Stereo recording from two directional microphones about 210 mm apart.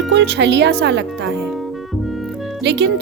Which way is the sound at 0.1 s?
55° right (ahead or behind).